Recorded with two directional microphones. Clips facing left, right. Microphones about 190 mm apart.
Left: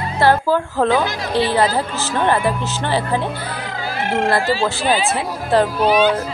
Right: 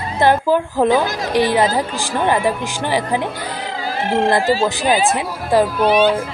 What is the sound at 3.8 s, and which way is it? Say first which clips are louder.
Music: right 2 dB; 30° right (ahead or behind).